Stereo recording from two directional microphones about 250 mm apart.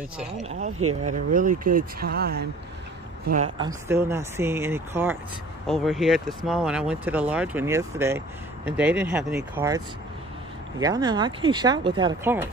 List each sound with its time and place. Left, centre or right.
0.4 s speech: right
0.7 s speech: right
1.1 s speech: right
3.5 s speech: centre